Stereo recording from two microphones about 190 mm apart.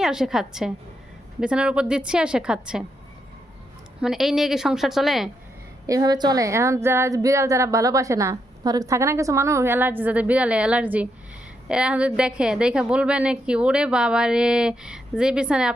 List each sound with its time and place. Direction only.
0.0 s a woman's voice: centre (ahead or behind)
4.0 s a woman's voice: centre (ahead or behind)
5.8 s a woman's voice: 20° right (ahead or behind)